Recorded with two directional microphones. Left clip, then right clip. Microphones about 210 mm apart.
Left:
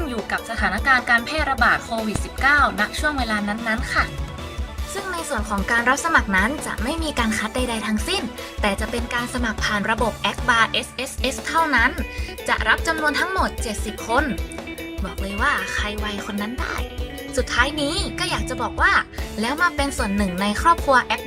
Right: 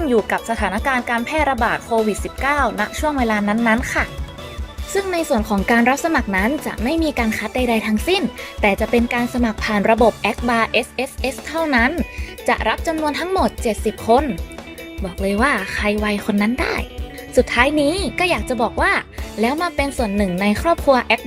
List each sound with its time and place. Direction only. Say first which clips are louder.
0.0 s speech: right 8 dB; centre (ahead or behind)
5.1 s speech: right 4 dB; 20° right (ahead or behind)
15.4 s speech: right 1 dB; 20° right (ahead or behind)